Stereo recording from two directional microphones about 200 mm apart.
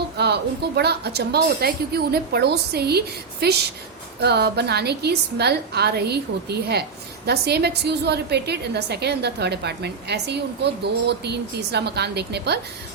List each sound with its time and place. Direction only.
0.2 s a woman's voice: 55° right (ahead or behind)